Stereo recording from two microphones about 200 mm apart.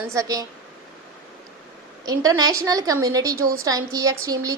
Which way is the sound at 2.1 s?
20° right (ahead or behind).